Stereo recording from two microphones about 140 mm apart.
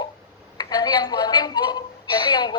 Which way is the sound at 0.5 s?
30° left (ahead or behind).